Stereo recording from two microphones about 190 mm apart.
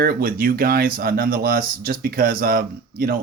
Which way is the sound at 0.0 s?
50° right (ahead or behind).